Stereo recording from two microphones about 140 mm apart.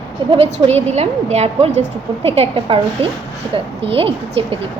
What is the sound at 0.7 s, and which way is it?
A woman's voice, 50° right (ahead or behind).